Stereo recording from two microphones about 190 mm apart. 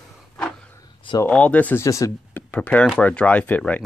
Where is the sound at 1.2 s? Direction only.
5° left (ahead or behind).